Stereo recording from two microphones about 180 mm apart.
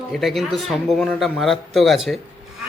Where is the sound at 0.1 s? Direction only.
Centre (ahead or behind).